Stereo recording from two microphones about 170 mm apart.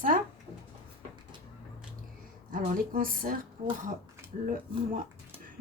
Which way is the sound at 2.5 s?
55° right (ahead or behind).